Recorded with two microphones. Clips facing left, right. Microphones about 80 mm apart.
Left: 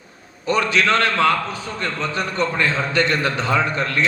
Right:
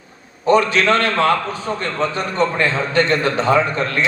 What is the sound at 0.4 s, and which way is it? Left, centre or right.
A man's voice, right.